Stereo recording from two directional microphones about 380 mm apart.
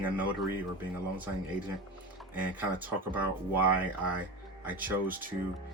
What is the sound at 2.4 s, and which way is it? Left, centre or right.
Speech, centre.